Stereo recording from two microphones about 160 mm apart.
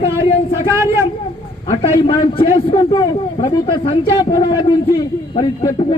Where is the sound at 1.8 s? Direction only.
35° left (ahead or behind).